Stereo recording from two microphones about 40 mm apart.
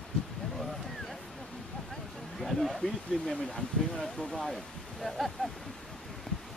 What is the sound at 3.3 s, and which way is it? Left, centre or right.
Speech, centre.